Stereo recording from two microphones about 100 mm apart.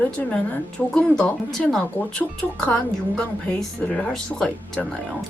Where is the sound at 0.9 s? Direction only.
10° left (ahead or behind).